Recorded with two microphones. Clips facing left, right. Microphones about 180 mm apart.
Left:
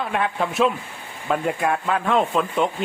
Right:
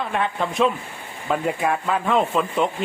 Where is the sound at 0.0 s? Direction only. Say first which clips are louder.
Even; centre (ahead or behind).